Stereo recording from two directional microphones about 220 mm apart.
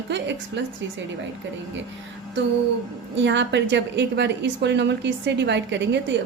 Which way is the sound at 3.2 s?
55° right (ahead or behind).